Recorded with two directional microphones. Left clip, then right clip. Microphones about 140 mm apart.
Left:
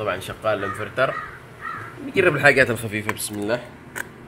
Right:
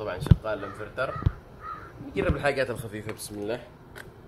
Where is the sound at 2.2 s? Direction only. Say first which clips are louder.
Left 10 dB; 25° left (ahead or behind).